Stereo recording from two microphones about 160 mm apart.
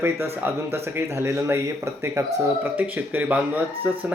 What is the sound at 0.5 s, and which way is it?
Speech, 15° right (ahead or behind).